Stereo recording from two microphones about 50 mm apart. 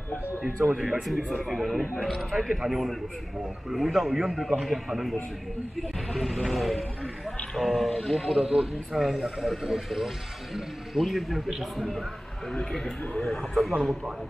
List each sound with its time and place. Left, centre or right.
1.0 s speech: centre
2.6 s a man's voice: centre
12.8 s speech: left
13.2 s speech: centre